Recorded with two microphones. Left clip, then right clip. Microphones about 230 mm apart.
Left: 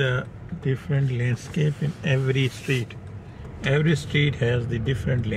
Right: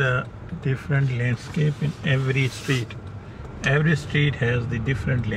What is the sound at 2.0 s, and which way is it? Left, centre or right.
Speech, left.